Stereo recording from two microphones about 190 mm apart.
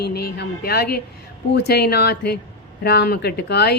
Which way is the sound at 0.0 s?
55° left (ahead or behind).